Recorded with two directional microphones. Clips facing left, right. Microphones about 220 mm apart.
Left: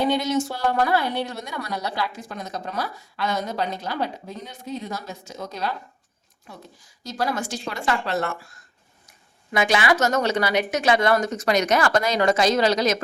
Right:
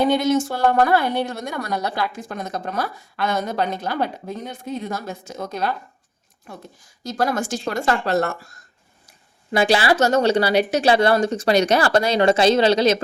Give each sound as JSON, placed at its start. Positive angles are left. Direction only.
{"t": 0.0, "sound": "a woman's voice", "side_deg": -50}